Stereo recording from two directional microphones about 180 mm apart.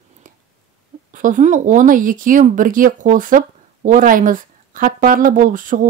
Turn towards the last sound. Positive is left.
turn(degrees=-45)  # may be behind; listen again after turning